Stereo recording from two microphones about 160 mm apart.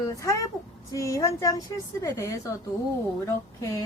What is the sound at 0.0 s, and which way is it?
Speech, 20° left (ahead or behind).